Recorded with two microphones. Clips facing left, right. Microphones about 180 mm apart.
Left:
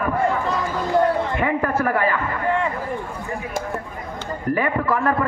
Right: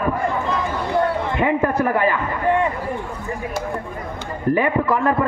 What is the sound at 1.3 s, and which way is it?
Speech, 20° right (ahead or behind).